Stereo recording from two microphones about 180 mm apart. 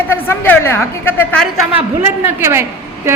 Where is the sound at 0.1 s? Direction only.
10° left (ahead or behind).